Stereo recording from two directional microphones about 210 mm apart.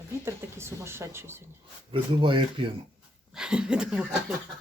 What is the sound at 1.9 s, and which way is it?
Speech, 25° right (ahead or behind).